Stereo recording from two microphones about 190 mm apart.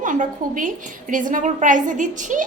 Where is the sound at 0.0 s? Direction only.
40° right (ahead or behind).